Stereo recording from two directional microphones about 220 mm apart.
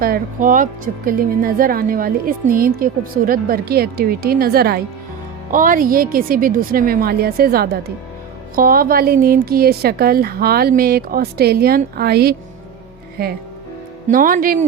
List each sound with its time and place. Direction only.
0.0 s a woman's voice: 40° right (ahead or behind)